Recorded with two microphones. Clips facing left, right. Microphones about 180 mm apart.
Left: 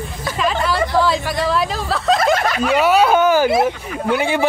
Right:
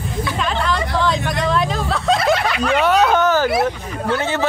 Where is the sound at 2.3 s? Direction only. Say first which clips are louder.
Even; 45° left (ahead or behind).